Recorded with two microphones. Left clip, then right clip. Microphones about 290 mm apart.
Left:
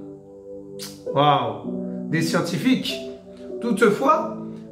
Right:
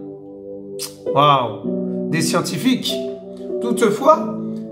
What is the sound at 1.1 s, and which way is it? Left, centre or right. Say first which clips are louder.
A man's voice: right 4 dB; right.